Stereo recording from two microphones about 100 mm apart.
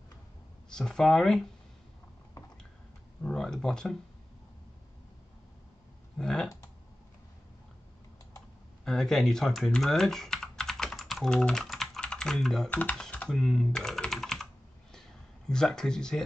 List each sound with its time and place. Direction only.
0.7 s speech: 5° left (ahead or behind)
3.3 s speech: 5° left (ahead or behind)
6.1 s speech: 5° left (ahead or behind)
8.8 s speech: 5° left (ahead or behind)
12.6 s speech: 15° left (ahead or behind)
13.0 s typing: 10° left (ahead or behind)
13.4 s computer keyboard: centre (ahead or behind)